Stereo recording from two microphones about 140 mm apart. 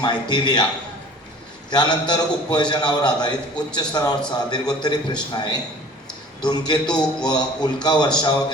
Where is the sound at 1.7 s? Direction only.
30° left (ahead or behind).